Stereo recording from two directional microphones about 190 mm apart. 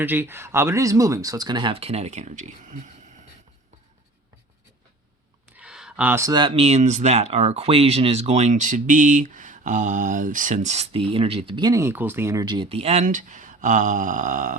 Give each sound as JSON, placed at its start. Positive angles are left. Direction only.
{"t": 0.0, "sound": "speech", "side_deg": -10}
{"t": 5.5, "sound": "speech", "side_deg": -5}